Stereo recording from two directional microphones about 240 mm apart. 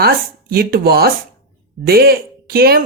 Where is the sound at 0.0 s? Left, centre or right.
Right.